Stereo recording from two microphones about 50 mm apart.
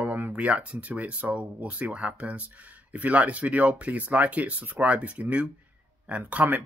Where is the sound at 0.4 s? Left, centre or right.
Right.